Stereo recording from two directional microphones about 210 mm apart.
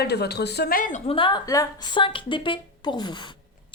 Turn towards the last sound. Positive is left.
turn(degrees=20)  # may be behind; listen again after turning